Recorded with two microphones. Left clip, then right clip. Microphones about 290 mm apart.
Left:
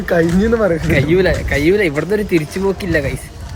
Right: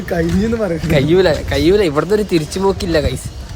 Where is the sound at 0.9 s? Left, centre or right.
Centre.